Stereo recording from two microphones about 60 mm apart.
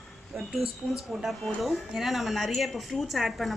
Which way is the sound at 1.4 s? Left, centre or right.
Centre.